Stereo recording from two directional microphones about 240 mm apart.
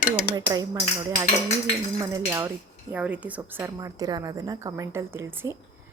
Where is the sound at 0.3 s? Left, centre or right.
Centre.